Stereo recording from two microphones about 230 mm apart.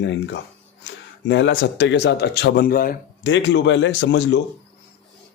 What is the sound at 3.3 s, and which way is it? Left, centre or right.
Speech, left.